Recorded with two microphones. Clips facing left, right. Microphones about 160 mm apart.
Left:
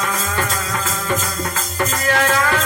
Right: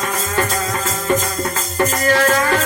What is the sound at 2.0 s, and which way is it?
Music, 40° right (ahead or behind).